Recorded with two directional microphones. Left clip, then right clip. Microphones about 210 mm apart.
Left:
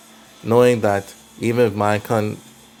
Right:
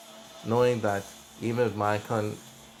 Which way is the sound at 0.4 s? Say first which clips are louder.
Left 10 dB; 45° left (ahead or behind).